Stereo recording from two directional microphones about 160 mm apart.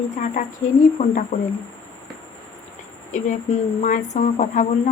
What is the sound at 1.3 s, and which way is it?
Speech, 45° left (ahead or behind).